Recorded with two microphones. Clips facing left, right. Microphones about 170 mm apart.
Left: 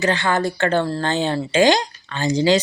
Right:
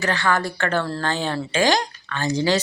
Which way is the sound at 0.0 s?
20° left (ahead or behind).